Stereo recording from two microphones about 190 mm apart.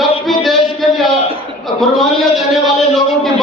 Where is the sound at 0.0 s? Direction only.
Centre (ahead or behind).